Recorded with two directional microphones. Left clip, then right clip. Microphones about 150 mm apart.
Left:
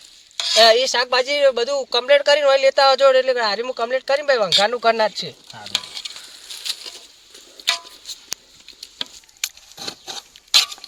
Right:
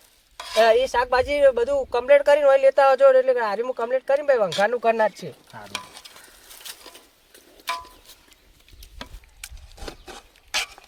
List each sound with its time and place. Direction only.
0.3 s stir: 5° right (ahead or behind)
0.6 s speech: 20° right (ahead or behind)
1.6 s speech: centre (ahead or behind)
1.9 s speech: 15° right (ahead or behind); by 5.1 s centre (ahead or behind)
5.6 s sizzle: centre (ahead or behind)
10.5 s a sound: 10° right (ahead or behind)